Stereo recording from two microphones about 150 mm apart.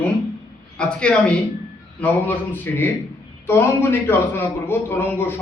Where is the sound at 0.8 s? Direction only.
5° left (ahead or behind).